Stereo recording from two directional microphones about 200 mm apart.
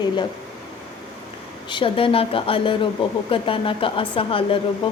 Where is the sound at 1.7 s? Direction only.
25° left (ahead or behind).